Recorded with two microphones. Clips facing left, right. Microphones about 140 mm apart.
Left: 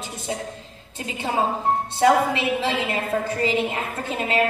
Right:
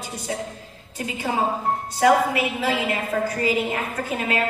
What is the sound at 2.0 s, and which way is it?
Speech, 25° left (ahead or behind).